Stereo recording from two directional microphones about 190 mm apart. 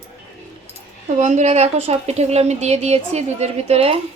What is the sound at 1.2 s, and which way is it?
A woman's voice, 40° right (ahead or behind).